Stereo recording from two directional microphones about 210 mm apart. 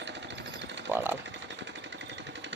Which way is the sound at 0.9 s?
10° right (ahead or behind).